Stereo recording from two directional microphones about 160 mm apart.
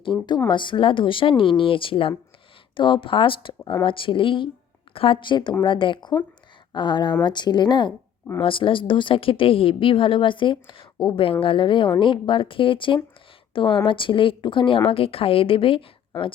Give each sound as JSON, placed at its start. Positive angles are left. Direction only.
{"t": 0.0, "sound": "a woman's voice", "side_deg": 30}